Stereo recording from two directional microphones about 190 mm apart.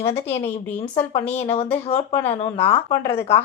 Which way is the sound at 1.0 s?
30° left (ahead or behind).